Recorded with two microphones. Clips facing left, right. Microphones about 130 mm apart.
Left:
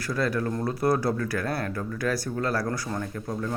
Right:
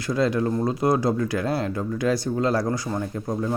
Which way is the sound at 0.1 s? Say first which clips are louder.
Right 5 dB; 20° right (ahead or behind).